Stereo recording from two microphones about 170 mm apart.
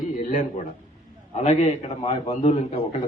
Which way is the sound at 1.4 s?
40° left (ahead or behind).